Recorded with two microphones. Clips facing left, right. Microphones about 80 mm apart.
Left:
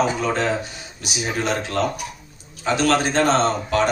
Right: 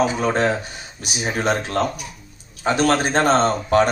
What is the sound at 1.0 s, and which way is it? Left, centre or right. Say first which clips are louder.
Speech: right 2 dB; right.